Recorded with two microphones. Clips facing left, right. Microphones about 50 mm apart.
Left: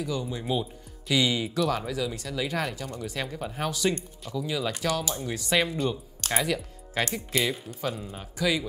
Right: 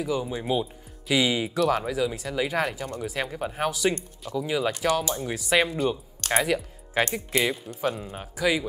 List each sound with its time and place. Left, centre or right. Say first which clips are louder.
0.0 s speech: right 3 dB; centre
3.3 s speech: right 3 dB; right
3.6 s speech: right 2 dB; centre
6.4 s speech: right 3 dB; centre
8.4 s speech: right 2 dB; centre